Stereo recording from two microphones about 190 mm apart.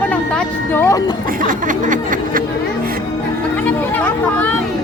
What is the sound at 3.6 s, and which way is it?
Speech, 10° left (ahead or behind).